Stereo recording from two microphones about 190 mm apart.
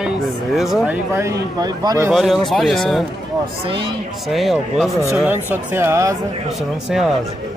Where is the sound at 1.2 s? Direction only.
20° right (ahead or behind).